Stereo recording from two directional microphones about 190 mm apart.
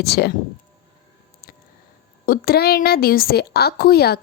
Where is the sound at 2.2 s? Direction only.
50° left (ahead or behind).